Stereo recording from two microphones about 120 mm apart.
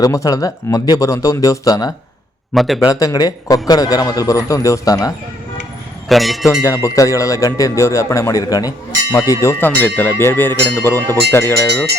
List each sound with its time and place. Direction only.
0.0 s speech: 30° left (ahead or behind)
2.6 s a man's voice: centre (ahead or behind)
2.8 s a man's voice: 30° left (ahead or behind)
6.1 s a man's voice: centre (ahead or behind)
6.6 s speech: 25° left (ahead or behind)